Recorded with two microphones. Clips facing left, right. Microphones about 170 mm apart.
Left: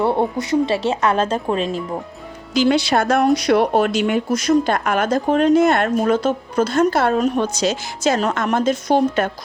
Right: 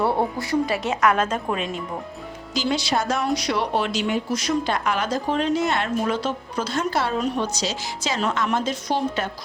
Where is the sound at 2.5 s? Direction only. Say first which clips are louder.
Left 7 dB; 60° left (ahead or behind).